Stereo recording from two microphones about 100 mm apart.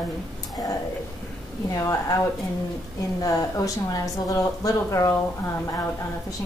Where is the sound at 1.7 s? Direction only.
35° left (ahead or behind).